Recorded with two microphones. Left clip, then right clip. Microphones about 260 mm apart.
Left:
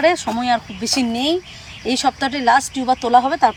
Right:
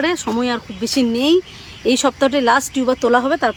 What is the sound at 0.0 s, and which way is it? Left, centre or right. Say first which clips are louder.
Speech: left 2 dB; centre.